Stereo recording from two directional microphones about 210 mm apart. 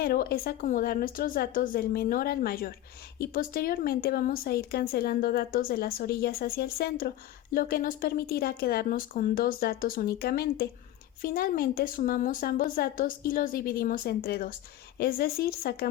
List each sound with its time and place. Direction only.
0.0 s a woman's voice: 45° left (ahead or behind)